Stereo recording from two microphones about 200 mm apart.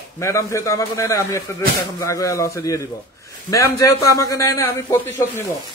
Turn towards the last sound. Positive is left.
turn(degrees=10)  # may be behind; listen again after turning